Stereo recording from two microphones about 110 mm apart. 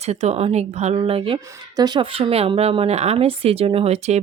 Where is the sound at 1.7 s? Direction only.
40° right (ahead or behind).